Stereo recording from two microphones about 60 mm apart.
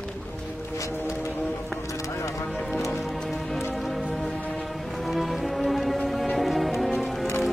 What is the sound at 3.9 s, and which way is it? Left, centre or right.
Music, centre.